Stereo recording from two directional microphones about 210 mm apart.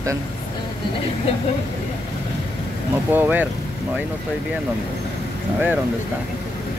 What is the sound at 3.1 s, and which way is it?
Speech, 10° right (ahead or behind).